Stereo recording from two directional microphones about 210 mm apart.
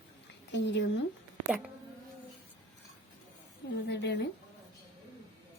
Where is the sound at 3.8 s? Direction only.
55° left (ahead or behind).